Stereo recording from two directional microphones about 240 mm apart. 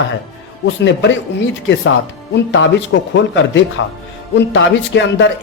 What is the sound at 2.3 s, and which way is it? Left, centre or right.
A man's voice, left.